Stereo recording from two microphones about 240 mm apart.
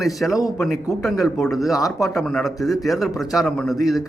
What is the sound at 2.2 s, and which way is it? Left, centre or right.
A man's voice, centre.